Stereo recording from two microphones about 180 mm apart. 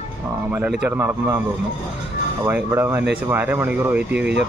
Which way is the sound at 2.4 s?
10° right (ahead or behind).